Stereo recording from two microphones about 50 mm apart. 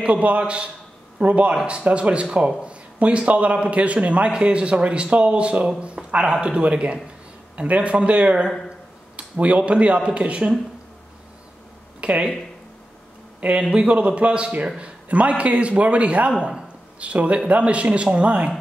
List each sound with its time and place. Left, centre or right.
0.0 s a man's voice: right
12.0 s speech: right
13.4 s a man's voice: right
16.3 s speech: centre
17.0 s a man's voice: right